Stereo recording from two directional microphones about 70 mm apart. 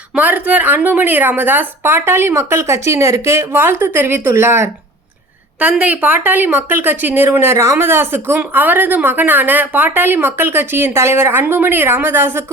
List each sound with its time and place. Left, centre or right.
0.1 s speech: right
5.5 s speech: centre